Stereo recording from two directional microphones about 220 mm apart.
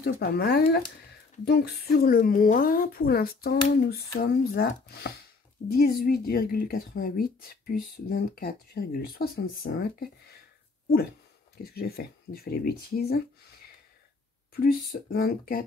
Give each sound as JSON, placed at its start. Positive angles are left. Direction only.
{"t": 0.0, "sound": "a woman's voice", "side_deg": 45}
{"t": 11.5, "sound": "a woman's voice", "side_deg": 45}
{"t": 14.5, "sound": "a woman's voice", "side_deg": 45}